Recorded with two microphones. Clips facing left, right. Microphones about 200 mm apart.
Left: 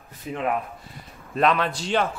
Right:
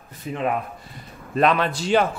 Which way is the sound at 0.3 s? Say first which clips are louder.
Right 1 dB; 5° left (ahead or behind).